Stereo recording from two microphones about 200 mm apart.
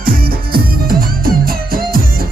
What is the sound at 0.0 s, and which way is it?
Music, 45° right (ahead or behind).